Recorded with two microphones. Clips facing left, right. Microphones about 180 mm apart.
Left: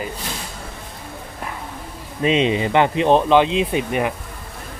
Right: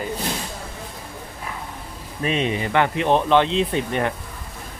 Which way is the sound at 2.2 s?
20° left (ahead or behind).